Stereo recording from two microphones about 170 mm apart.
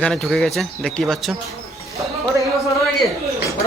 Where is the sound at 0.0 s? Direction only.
5° left (ahead or behind).